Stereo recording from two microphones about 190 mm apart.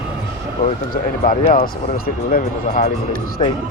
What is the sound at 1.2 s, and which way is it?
Speech, 40° left (ahead or behind).